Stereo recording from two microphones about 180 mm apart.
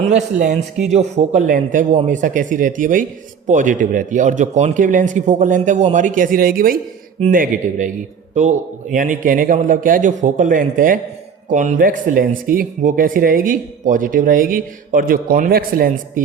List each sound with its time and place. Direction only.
0.1 s a man's voice: 45° right (ahead or behind)